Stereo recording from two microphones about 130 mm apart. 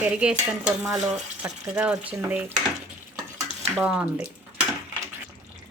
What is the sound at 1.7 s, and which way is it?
Speech, 10° right (ahead or behind).